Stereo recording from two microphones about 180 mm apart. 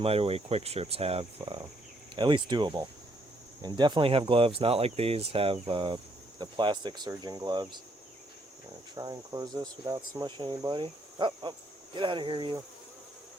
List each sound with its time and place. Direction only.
0.0 s speech: 35° right (ahead or behind)
9.0 s speech: 20° right (ahead or behind)